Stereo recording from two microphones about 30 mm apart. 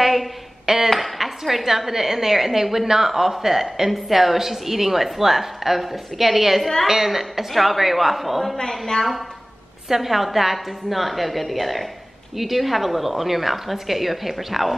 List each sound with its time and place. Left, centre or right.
0.0 s a sound: centre
0.8 s a woman's voice: centre
8.5 s a woman's voice: left
9.8 s a woman's voice: centre